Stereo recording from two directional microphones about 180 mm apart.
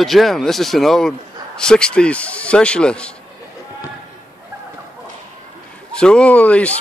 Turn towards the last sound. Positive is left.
turn(degrees=10)  # may be behind; listen again after turning